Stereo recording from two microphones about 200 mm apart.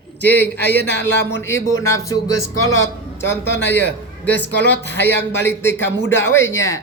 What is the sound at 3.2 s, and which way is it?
Speech, 60° left (ahead or behind).